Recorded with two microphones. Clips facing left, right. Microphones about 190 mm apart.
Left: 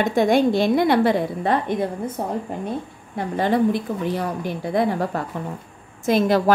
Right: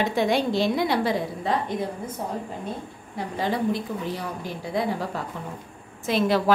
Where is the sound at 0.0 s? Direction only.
50° left (ahead or behind); by 2.3 s 65° left (ahead or behind).